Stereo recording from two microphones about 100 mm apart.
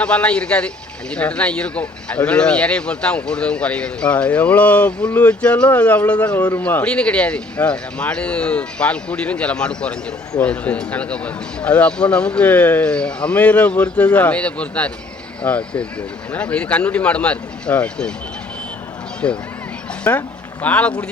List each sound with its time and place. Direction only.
0.0 s speech: 10° left (ahead or behind)
19.2 s speech: 15° left (ahead or behind)